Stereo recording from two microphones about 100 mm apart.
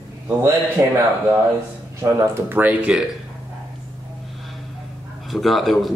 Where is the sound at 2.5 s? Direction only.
20° right (ahead or behind).